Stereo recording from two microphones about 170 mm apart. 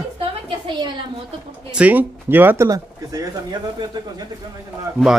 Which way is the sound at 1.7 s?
10° right (ahead or behind).